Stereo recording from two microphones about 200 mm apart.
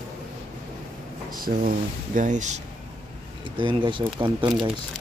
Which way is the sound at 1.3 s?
45° right (ahead or behind).